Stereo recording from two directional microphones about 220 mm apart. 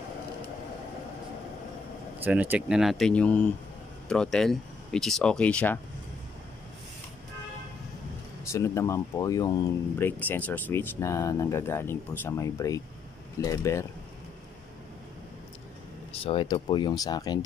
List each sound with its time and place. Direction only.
2.2 s speech: 10° right (ahead or behind)
8.5 s speech: 15° left (ahead or behind)
16.3 s speech: 20° left (ahead or behind)